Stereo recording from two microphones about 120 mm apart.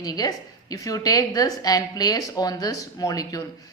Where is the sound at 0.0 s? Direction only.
35° left (ahead or behind).